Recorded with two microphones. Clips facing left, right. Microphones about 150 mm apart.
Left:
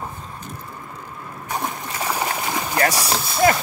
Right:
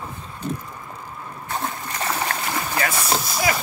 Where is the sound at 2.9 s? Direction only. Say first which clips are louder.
Even; 70° left (ahead or behind).